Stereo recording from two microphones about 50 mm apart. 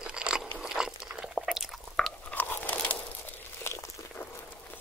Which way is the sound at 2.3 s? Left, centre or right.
Left.